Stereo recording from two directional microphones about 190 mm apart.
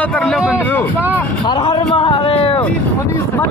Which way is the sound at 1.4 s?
30° left (ahead or behind).